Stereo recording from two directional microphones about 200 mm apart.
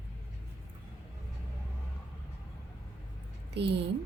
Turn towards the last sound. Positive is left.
turn(degrees=-60)  # may be behind; listen again after turning